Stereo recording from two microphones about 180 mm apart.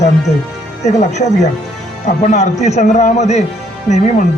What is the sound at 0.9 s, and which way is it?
Speech, 40° left (ahead or behind).